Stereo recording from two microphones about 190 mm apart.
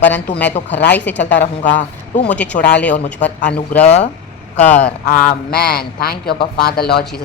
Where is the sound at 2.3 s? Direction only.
5° left (ahead or behind).